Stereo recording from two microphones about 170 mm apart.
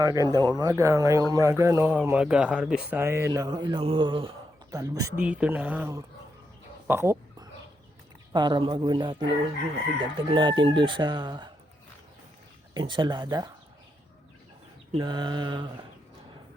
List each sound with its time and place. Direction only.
0.0 s chicken: 20° right (ahead or behind)
1.3 s speech: 15° right (ahead or behind)
4.7 s chicken: 20° right (ahead or behind)
5.1 s speech: 5° right (ahead or behind)
6.8 s a sound: 15° right (ahead or behind)
8.3 s chicken: 25° right (ahead or behind)
12.7 s chicken: 25° right (ahead or behind)
14.9 s chicken: 25° right (ahead or behind)